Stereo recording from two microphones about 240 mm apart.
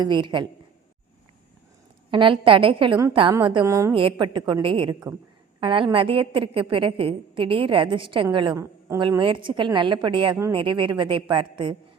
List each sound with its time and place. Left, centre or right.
0.0 s a woman's voice: centre
2.0 s a woman's voice: right